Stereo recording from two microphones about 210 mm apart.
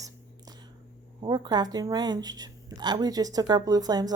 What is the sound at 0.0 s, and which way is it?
Whispering, 20° right (ahead or behind).